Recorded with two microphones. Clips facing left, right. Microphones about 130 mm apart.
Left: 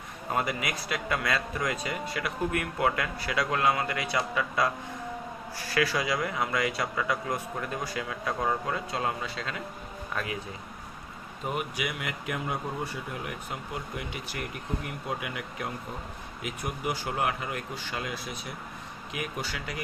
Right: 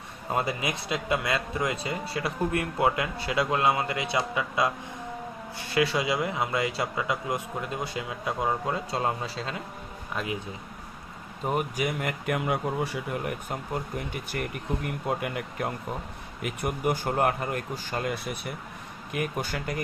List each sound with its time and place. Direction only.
0.3 s speech: 25° right (ahead or behind)
11.4 s speech: 40° right (ahead or behind)